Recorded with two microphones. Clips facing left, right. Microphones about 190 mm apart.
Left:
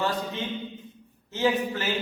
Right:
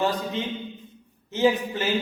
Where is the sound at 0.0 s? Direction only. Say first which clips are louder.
Right 3 dB; 20° right (ahead or behind).